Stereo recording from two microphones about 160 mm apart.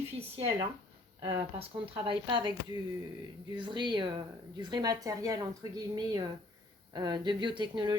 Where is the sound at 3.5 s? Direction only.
30° right (ahead or behind).